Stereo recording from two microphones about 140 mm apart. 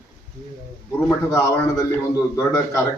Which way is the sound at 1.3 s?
20° left (ahead or behind).